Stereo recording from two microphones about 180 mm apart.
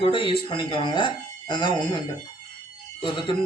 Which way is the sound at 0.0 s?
30° left (ahead or behind).